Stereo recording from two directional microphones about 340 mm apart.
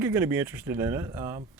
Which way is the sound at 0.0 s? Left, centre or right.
Centre.